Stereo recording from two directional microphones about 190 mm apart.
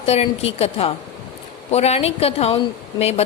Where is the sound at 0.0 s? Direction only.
30° left (ahead or behind).